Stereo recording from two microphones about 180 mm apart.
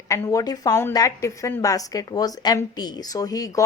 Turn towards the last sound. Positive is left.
turn(degrees=20)  # may be behind; listen again after turning